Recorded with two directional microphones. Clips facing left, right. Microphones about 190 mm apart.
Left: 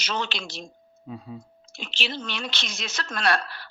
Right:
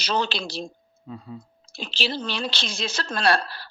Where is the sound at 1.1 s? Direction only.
10° left (ahead or behind).